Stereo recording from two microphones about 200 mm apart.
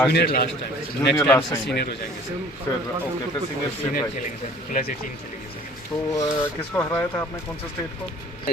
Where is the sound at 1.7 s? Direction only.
55° left (ahead or behind).